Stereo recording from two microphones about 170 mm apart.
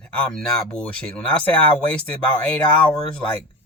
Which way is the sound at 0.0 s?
5° left (ahead or behind).